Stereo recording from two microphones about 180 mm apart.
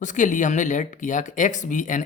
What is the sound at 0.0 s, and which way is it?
Speech, 45° left (ahead or behind).